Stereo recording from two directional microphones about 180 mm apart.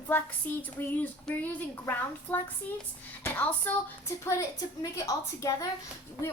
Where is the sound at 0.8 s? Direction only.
10° left (ahead or behind).